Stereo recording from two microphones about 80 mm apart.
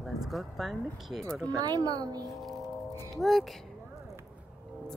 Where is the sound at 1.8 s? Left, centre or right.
Right.